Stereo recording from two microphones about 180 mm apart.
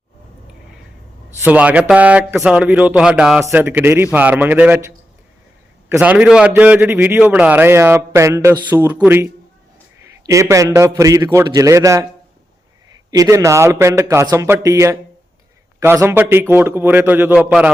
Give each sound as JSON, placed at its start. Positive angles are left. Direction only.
{"t": 1.5, "sound": "a man's voice", "side_deg": -10}
{"t": 13.1, "sound": "a man's voice", "side_deg": -20}